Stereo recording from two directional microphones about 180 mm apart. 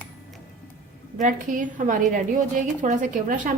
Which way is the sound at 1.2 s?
45° right (ahead or behind).